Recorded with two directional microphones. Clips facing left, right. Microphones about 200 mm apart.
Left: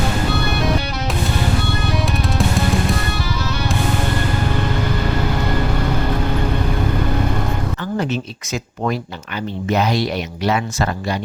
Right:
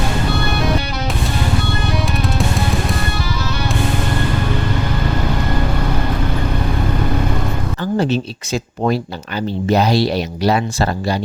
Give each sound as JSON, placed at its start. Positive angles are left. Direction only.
{"t": 7.9, "sound": "speech", "side_deg": -30}